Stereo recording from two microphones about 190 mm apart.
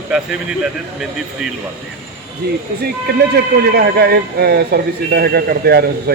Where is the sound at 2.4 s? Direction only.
55° right (ahead or behind).